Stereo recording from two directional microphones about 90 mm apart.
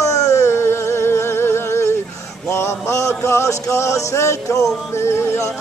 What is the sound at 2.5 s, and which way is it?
Male singing, 30° left (ahead or behind).